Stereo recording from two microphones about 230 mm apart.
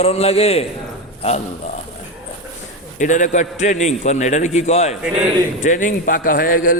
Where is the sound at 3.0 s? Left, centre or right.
Left.